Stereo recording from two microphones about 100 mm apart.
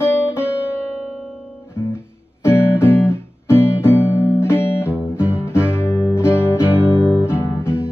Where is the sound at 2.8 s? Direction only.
25° left (ahead or behind).